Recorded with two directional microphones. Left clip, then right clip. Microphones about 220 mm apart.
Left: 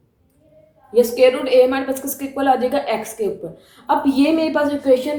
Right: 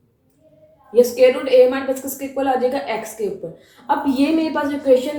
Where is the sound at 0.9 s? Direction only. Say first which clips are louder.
Even; 40° left (ahead or behind).